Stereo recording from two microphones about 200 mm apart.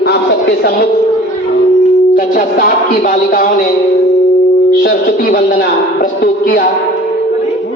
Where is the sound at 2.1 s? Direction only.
45° left (ahead or behind).